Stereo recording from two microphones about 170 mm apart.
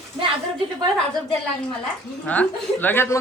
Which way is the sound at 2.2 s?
10° left (ahead or behind).